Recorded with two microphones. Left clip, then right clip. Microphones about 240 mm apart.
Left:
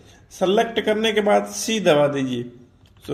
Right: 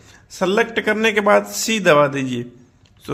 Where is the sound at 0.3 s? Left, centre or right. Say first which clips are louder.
Right 1 dB; right.